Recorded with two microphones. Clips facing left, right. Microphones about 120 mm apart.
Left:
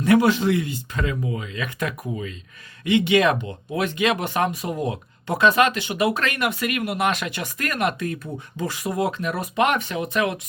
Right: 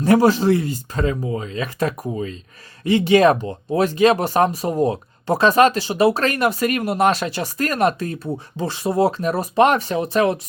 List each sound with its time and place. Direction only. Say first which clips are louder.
0.0 s speech: right 3 dB; 35° right (ahead or behind)